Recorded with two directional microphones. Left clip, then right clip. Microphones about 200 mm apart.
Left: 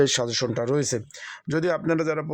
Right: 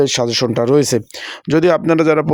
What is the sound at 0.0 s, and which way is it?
Speech, 20° right (ahead or behind).